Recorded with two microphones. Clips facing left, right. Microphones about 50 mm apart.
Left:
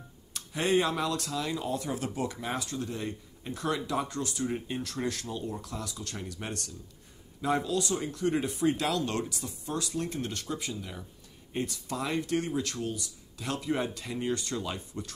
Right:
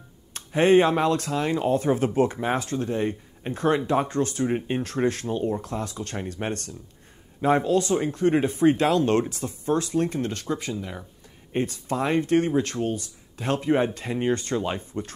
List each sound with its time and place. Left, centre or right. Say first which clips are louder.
0.3 s speech: right 9 dB; right